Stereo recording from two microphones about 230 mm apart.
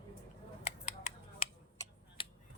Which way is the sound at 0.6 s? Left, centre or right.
Left.